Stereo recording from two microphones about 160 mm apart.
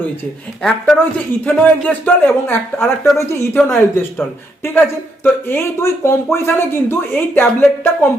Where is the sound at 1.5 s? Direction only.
10° left (ahead or behind).